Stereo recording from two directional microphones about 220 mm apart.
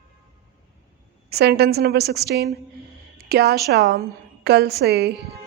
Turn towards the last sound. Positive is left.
turn(degrees=-50)  # may be behind; listen again after turning